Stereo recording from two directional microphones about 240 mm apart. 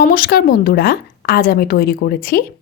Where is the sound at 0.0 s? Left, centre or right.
Left.